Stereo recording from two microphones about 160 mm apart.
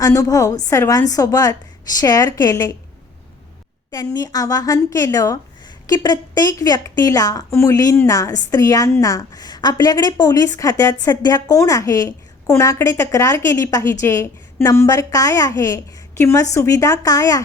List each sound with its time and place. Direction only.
0.0 s a woman's voice: 20° left (ahead or behind)
3.9 s a woman's voice: 25° left (ahead or behind)